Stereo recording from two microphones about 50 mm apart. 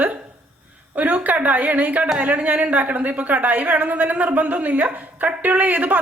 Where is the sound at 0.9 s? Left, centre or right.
Right.